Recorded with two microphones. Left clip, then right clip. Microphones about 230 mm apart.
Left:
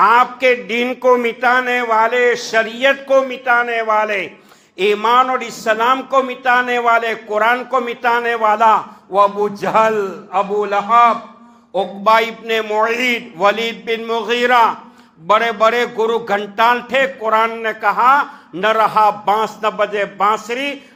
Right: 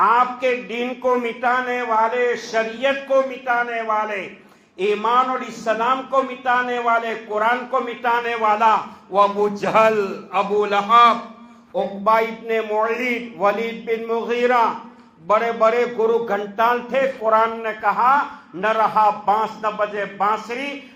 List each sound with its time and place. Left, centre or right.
0.0 s a man's voice: left
11.7 s a man's voice: left